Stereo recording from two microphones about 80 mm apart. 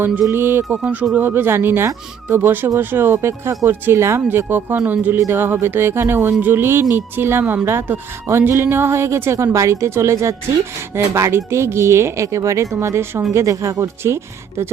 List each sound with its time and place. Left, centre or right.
0.0 s speech: right
0.8 s a woman's voice: centre; by 14.2 s right